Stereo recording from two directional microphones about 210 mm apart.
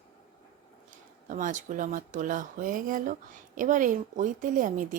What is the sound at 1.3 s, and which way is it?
Speech, 40° right (ahead or behind).